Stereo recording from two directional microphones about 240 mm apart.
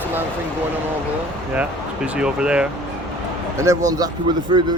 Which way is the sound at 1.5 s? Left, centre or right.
Centre.